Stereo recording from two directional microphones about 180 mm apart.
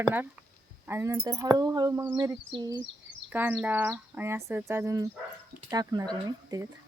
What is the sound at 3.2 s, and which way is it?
Speech, 10° right (ahead or behind).